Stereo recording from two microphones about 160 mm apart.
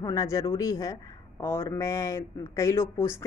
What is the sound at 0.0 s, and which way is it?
Speech, 20° left (ahead or behind).